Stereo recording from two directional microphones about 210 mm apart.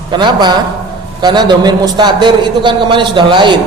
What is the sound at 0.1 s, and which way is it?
A man's voice, 20° right (ahead or behind).